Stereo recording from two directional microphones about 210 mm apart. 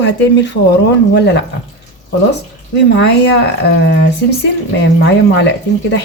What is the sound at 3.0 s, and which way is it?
Speech, 55° left (ahead or behind).